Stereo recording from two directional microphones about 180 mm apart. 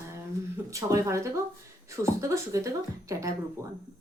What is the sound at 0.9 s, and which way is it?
A woman's voice, 15° right (ahead or behind).